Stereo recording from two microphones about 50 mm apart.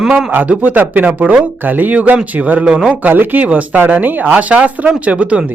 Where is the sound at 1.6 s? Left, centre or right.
Right.